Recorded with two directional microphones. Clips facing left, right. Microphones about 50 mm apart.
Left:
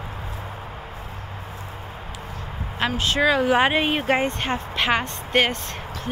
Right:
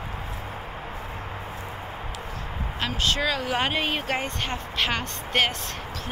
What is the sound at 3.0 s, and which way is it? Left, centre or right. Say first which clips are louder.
Speech: left 6 dB; centre.